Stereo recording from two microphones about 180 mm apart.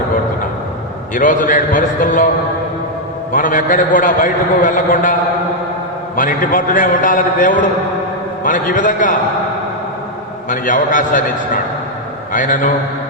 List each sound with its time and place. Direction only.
1.1 s a man's voice: 50° left (ahead or behind)
3.3 s a man's voice: 50° left (ahead or behind)
6.1 s a man's voice: 45° left (ahead or behind)
10.5 s a man's voice: 45° left (ahead or behind)